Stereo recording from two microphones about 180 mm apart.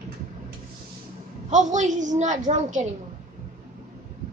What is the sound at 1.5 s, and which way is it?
A woman's voice, 40° right (ahead or behind).